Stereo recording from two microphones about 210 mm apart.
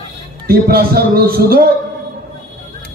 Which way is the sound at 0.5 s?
45° right (ahead or behind).